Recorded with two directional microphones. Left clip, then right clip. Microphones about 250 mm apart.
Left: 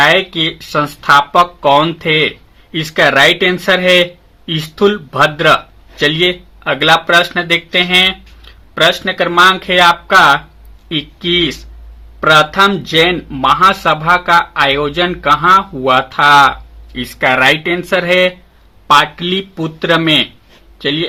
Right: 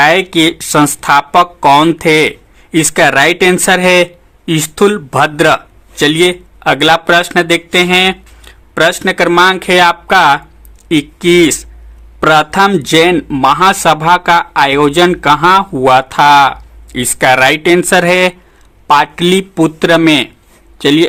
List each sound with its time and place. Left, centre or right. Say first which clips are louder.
0.0 s speech: right 2 dB; right